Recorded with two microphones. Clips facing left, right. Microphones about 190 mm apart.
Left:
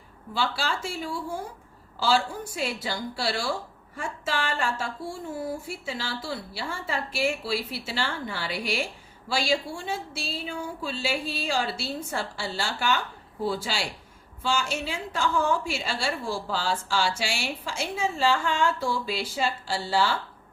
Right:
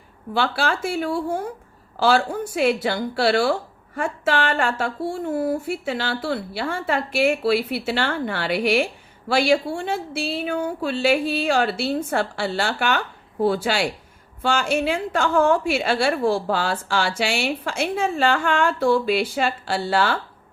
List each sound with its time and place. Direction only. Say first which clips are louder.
0.3 s a woman's voice: right 6 dB; 60° right (ahead or behind)